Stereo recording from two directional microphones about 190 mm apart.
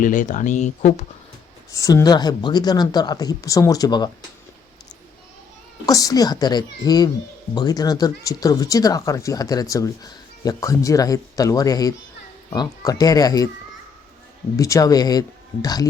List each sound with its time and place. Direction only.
0.0 s speech: 45° left (ahead or behind)
1.7 s speech: 15° left (ahead or behind)
5.8 s speech: 20° left (ahead or behind)
14.5 s speech: 15° left (ahead or behind)